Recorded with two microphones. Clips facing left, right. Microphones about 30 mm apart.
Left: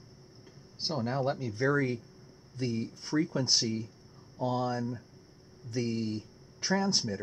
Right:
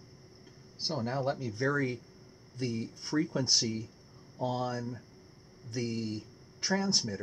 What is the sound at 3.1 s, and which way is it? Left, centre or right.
Speech, centre.